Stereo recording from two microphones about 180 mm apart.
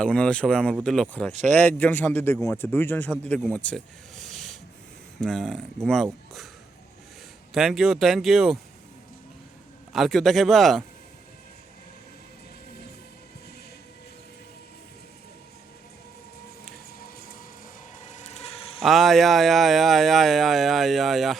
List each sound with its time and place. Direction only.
0.0 s a man's voice: 5° left (ahead or behind)
7.5 s speech: centre (ahead or behind)
9.9 s speech: centre (ahead or behind)
16.7 s a sound: 55° left (ahead or behind)
18.0 s a sound: 35° left (ahead or behind)
18.8 s speech: centre (ahead or behind)